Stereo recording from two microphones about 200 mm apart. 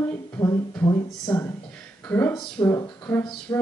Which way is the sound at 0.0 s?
15° left (ahead or behind).